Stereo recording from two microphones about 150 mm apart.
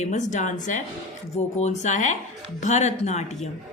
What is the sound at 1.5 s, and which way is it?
A woman's voice, 50° left (ahead or behind).